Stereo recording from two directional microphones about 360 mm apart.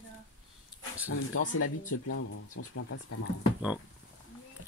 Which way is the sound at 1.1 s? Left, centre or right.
Left.